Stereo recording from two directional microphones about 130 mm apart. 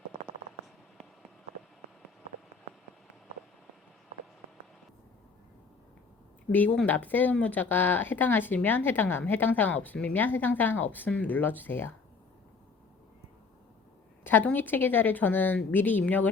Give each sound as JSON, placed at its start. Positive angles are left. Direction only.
{"t": 6.5, "sound": "speech", "side_deg": 15}
{"t": 14.3, "sound": "speech", "side_deg": 15}